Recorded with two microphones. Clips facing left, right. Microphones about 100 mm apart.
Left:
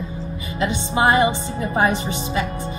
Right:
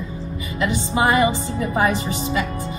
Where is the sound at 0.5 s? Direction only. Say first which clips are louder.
Even; 30° left (ahead or behind).